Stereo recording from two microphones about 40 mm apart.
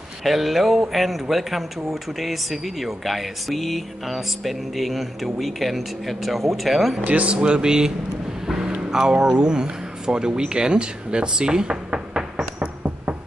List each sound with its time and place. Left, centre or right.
0.2 s speech: centre
7.1 s speech: right
7.3 s speech: right